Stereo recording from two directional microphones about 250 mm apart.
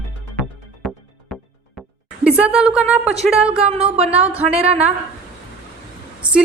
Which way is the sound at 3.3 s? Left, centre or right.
Centre.